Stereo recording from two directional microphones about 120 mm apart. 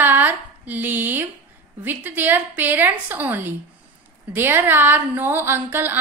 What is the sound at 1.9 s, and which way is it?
A woman's voice, 15° right (ahead or behind).